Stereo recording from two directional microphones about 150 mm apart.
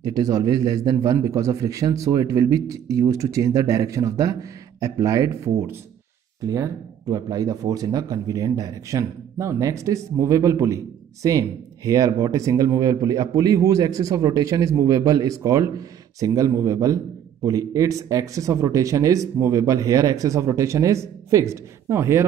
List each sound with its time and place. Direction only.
0.0 s a man's voice: 25° right (ahead or behind)